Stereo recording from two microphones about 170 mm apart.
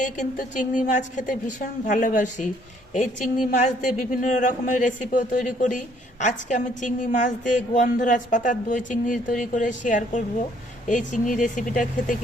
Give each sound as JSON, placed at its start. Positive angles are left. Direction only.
{"t": 0.0, "sound": "speech", "side_deg": 45}